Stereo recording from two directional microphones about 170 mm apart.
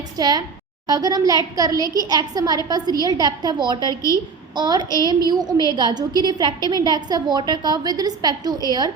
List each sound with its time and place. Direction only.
0.2 s a woman's voice: 25° right (ahead or behind)